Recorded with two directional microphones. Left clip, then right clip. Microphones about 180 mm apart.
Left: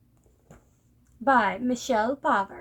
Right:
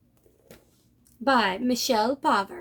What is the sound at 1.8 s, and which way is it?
Speech, 30° right (ahead or behind).